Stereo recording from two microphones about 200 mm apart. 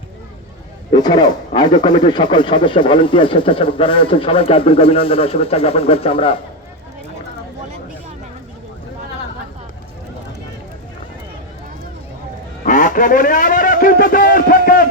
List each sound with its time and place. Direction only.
0.9 s speech: 20° left (ahead or behind)
12.6 s a man's voice: 40° left (ahead or behind)